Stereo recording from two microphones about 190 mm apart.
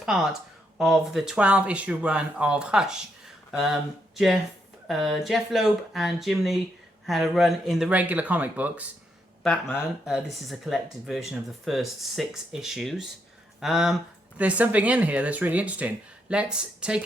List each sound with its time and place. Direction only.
0.8 s speech: centre (ahead or behind)
9.4 s speech: 5° left (ahead or behind)